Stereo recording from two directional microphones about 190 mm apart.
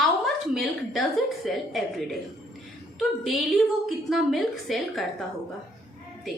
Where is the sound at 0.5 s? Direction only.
Centre (ahead or behind).